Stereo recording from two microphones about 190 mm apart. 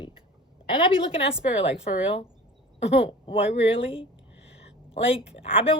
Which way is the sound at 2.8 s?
30° left (ahead or behind).